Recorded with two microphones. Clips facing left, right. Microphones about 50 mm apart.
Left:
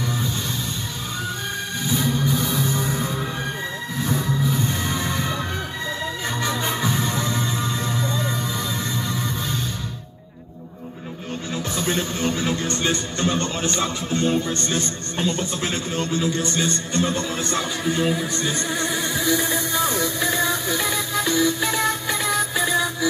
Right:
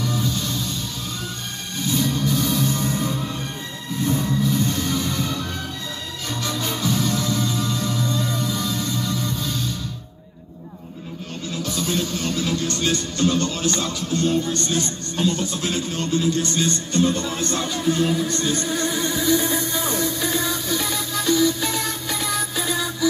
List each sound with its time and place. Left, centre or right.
0.0 s music: left
1.9 s music: centre
6.4 s music: left
11.7 s music: left
16.5 s a man's voice: left
18.7 s music: centre
20.0 s music: centre